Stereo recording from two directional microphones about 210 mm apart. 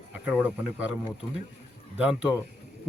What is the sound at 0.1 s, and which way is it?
Speech, 5° right (ahead or behind).